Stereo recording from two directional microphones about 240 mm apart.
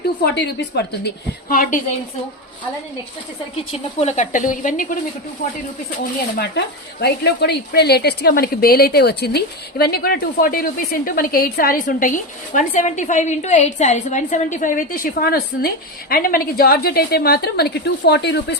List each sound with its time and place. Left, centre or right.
0.3 s a woman's voice: left
3.7 s a woman's voice: left
7.0 s a woman's voice: left